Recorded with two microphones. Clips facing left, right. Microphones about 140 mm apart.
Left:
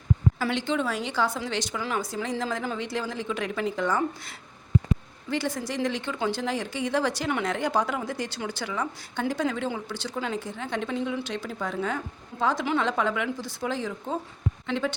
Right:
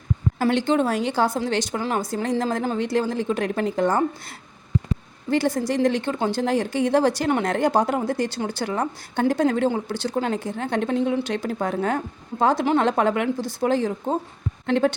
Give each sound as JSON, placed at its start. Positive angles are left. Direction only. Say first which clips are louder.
{"t": 0.3, "sound": "a woman's voice", "louder": "right 7 dB", "side_deg": -45}
{"t": 10.2, "sound": "a woman's voice", "louder": "right 6 dB", "side_deg": -55}